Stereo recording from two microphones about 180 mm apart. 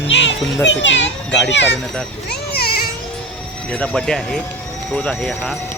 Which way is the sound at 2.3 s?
60° left (ahead or behind).